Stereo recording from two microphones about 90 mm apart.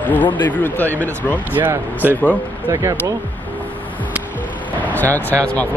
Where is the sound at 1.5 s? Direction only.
20° right (ahead or behind).